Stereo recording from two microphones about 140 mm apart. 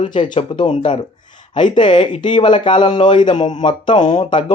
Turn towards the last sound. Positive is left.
turn(degrees=30)  # may be behind; listen again after turning